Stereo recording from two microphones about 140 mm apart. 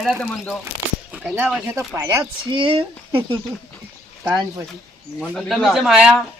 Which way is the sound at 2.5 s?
40° right (ahead or behind).